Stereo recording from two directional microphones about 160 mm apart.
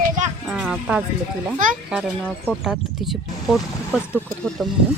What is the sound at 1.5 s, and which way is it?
Speech, 55° right (ahead or behind).